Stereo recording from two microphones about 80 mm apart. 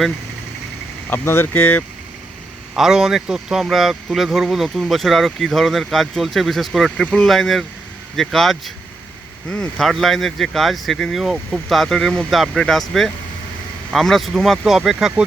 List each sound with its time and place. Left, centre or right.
1.1 s speech: left
1.5 s speech: centre
2.7 s speech: centre
13.9 s speech: centre